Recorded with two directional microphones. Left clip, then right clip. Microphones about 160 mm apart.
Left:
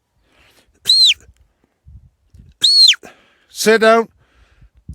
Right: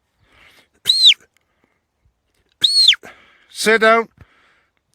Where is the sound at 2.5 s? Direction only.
40° left (ahead or behind).